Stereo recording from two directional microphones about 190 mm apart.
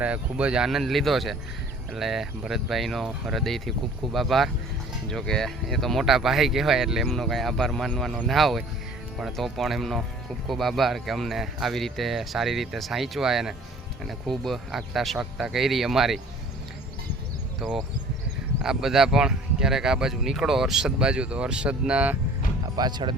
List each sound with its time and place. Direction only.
0.0 s speech: 5° right (ahead or behind)
17.6 s speech: centre (ahead or behind)
22.7 s speech: 20° right (ahead or behind)